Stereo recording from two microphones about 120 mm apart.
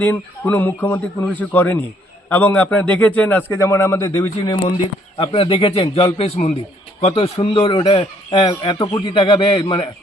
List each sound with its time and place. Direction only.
0.0 s a man's voice: 15° left (ahead or behind)
4.4 s speech: 55° left (ahead or behind)